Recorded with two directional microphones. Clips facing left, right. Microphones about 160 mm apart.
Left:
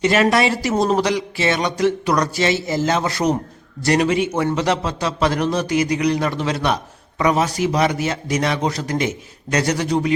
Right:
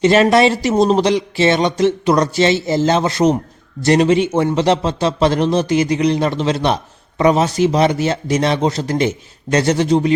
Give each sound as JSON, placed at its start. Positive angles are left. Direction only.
{"t": 0.0, "sound": "a man's voice", "side_deg": -25}